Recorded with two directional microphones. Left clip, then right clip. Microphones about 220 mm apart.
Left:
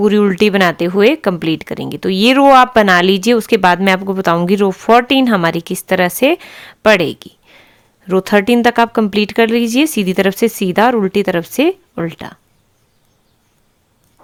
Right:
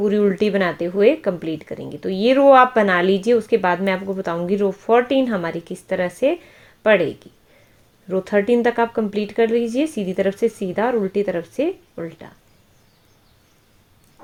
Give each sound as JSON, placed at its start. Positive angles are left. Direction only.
{"t": 0.0, "sound": "speech", "side_deg": 40}